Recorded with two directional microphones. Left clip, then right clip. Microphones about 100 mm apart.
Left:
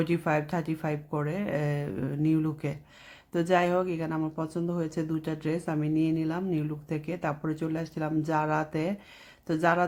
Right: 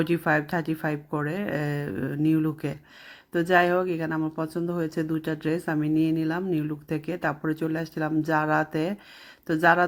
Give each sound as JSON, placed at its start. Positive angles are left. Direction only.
{"t": 0.0, "sound": "speech", "side_deg": -30}